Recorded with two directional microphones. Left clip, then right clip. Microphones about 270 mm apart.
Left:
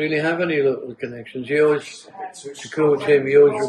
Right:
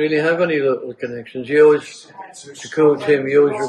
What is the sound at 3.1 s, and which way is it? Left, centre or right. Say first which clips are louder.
Speech: even; centre.